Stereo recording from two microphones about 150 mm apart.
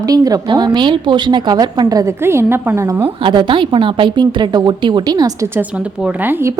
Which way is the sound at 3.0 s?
30° right (ahead or behind).